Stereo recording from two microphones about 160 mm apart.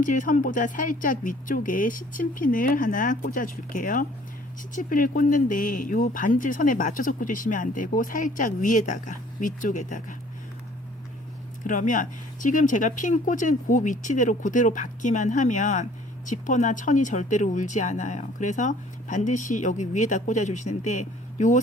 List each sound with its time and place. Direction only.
0.0 s speech: 55° left (ahead or behind)
11.6 s speech: 55° left (ahead or behind)